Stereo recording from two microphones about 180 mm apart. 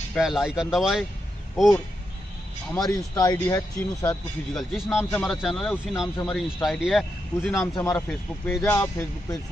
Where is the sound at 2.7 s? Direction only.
20° left (ahead or behind).